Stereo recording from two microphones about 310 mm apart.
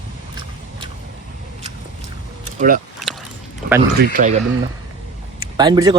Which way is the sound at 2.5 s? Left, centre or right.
Right.